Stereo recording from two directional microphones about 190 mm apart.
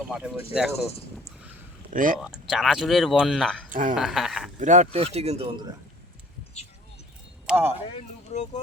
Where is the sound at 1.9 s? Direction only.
45° right (ahead or behind).